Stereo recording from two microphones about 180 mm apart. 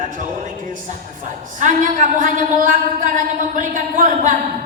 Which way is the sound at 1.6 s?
45° right (ahead or behind).